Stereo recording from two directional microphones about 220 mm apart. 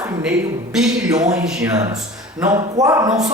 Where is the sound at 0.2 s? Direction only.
5° right (ahead or behind).